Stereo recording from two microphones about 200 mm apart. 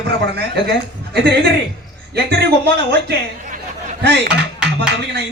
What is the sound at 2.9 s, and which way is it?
Speech, 55° right (ahead or behind).